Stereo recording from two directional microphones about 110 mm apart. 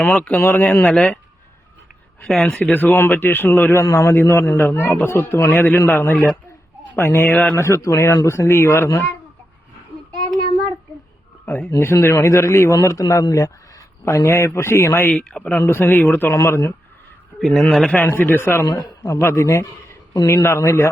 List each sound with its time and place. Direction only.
0.0 s speech: 15° left (ahead or behind)
2.2 s speech: 5° left (ahead or behind)
2.6 s a man's voice: 15° left (ahead or behind)
11.4 s a man's voice: 15° left (ahead or behind)
15.6 s a man's voice: 25° left (ahead or behind)
17.4 s speech: centre (ahead or behind)
17.9 s a man's voice: 15° left (ahead or behind)